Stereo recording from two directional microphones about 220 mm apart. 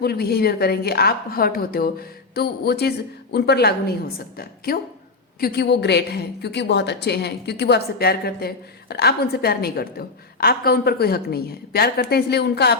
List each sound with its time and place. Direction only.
0.0 s a woman's voice: 45° left (ahead or behind)